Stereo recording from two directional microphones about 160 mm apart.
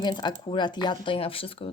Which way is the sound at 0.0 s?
25° left (ahead or behind).